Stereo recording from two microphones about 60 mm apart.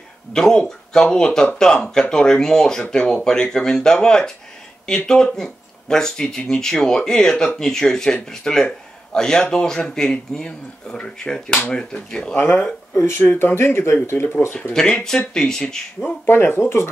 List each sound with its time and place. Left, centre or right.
0.3 s speech: centre
13.2 s speech: left
14.7 s speech: centre
16.3 s speech: left